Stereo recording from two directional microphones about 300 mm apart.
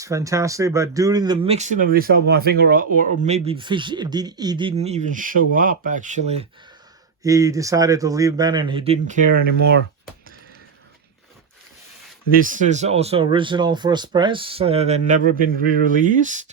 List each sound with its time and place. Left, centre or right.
0.0 s speech: centre
7.2 s speech: centre; by 9.7 s right
12.3 s speech: right